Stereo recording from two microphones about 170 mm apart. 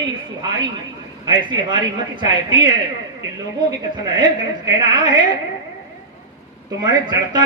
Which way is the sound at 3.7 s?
25° right (ahead or behind).